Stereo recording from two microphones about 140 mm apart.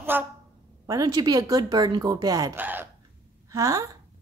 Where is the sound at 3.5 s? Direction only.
25° right (ahead or behind).